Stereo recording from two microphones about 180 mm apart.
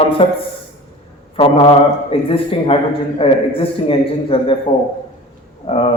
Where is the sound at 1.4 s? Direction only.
30° left (ahead or behind).